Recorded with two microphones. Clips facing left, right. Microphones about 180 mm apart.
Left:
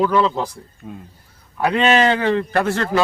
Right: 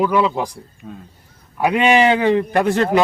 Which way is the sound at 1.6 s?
10° right (ahead or behind).